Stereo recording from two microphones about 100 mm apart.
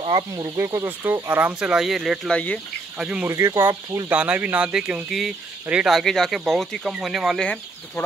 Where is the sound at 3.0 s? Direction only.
10° right (ahead or behind).